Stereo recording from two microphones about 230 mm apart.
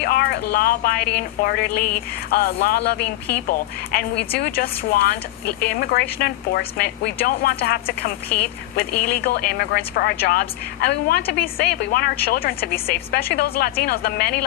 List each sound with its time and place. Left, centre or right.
0.0 s speech: left